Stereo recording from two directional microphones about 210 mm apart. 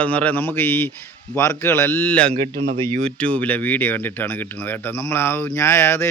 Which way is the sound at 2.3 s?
40° right (ahead or behind).